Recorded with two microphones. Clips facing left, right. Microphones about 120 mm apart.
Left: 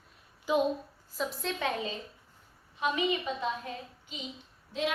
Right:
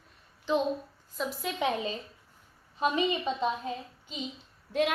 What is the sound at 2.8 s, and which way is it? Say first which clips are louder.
Speech: right 2 dB; 25° right (ahead or behind).